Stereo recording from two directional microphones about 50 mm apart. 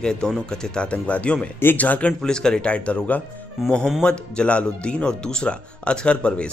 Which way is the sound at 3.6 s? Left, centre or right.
Centre.